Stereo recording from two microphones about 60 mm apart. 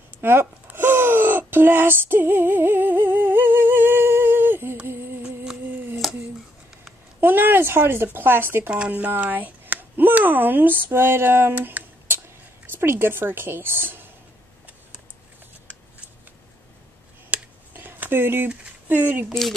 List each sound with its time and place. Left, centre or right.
0.2 s speech: right
0.7 s female singing: right
5.2 s humming: centre
6.0 s a sound: centre
7.2 s speech: right
8.6 s speech: centre
10.9 s speech: right
11.5 s a sound: right
12.6 s a woman's voice: right
17.3 s a sound: right
18.5 s speech: right